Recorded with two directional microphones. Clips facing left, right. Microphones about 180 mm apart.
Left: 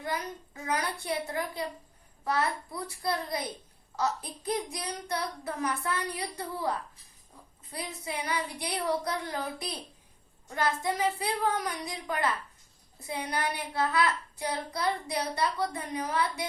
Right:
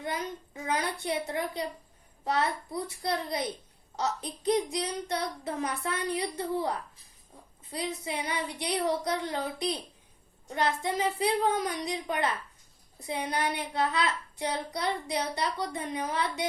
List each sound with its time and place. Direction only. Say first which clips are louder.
0.7 s child singing: right 1 dB; 25° right (ahead or behind)
7.7 s child singing: right 3 dB; 20° right (ahead or behind)